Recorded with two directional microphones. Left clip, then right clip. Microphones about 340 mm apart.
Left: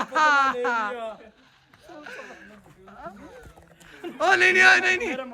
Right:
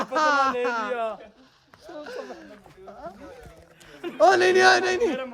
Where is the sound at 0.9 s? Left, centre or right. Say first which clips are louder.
Right 5 dB; right.